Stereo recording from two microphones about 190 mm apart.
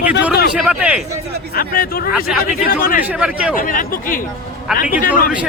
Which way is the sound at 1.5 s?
50° left (ahead or behind).